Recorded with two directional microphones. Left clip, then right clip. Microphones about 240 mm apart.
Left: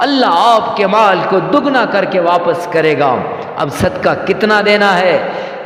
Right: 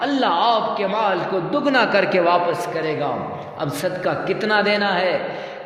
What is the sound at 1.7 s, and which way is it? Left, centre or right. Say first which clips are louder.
Speech: left 5 dB; centre.